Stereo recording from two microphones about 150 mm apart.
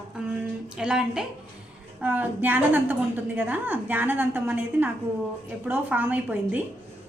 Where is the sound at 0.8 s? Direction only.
5° right (ahead or behind).